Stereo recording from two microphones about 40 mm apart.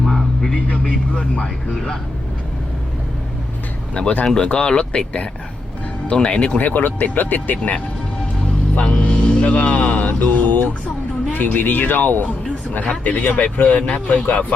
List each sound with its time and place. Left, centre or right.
0.0 s a sound: centre
0.5 s speech: left
4.0 s speech: left
6.6 s speech: left
8.9 s speech: left
12.8 s speech: left